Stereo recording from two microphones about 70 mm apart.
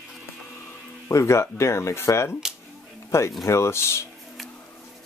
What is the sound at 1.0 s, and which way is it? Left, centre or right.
Speech, left.